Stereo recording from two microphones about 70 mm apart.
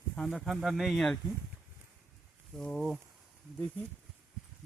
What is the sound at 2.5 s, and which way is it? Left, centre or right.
Speech, centre.